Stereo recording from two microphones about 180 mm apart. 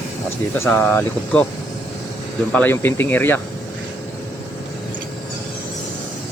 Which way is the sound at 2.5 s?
10° left (ahead or behind).